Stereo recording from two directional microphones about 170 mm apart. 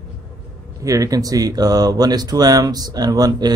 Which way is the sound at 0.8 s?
20° right (ahead or behind).